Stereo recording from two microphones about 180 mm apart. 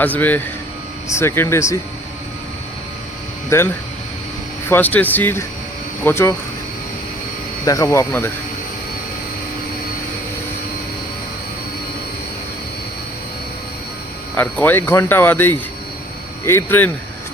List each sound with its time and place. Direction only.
0.0 s speech: 10° left (ahead or behind)
3.5 s speech: 15° left (ahead or behind)
4.7 s speech: 10° left (ahead or behind)
7.6 s speech: 20° left (ahead or behind)
14.3 s speech: 10° left (ahead or behind)